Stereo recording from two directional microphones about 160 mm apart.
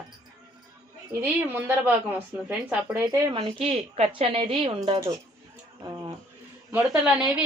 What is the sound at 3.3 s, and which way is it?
A woman's voice, 35° right (ahead or behind).